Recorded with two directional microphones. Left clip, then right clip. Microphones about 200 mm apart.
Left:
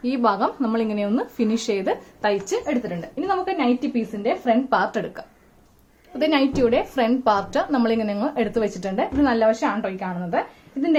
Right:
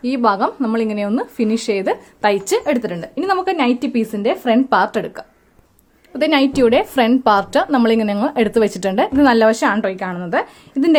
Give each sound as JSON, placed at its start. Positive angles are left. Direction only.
{"t": 0.0, "sound": "a woman's voice", "side_deg": -25}
{"t": 2.5, "sound": "a woman's voice", "side_deg": -50}